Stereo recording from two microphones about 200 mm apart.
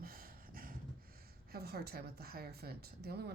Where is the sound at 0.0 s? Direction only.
45° right (ahead or behind).